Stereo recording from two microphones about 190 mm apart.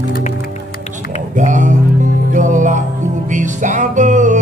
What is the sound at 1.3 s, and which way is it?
Music, 40° right (ahead or behind).